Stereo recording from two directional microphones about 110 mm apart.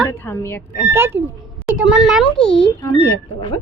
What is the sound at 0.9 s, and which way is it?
Speech, 20° right (ahead or behind).